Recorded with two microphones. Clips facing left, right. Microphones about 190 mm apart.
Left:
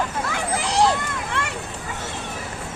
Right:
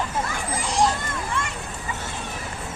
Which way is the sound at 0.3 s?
70° left (ahead or behind).